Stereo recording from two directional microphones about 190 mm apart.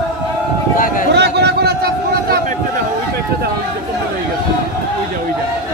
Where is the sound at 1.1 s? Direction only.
65° right (ahead or behind).